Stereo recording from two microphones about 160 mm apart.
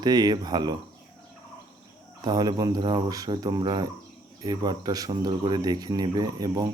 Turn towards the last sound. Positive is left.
turn(degrees=-20)  # may be behind; listen again after turning